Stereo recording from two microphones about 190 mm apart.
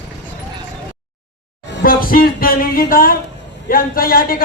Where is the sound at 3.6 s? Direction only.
50° left (ahead or behind).